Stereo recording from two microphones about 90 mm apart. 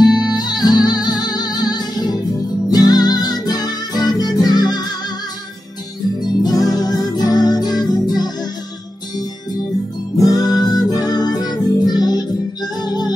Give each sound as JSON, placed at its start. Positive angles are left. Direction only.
{"t": 0.0, "sound": "music", "side_deg": 50}
{"t": 6.2, "sound": "music", "side_deg": 45}
{"t": 10.1, "sound": "music", "side_deg": 45}